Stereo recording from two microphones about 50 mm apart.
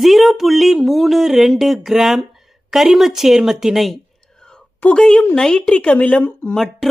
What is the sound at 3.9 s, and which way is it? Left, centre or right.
Whispering, centre.